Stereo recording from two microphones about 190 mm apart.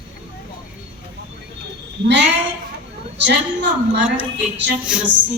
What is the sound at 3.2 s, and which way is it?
Speech, 65° right (ahead or behind).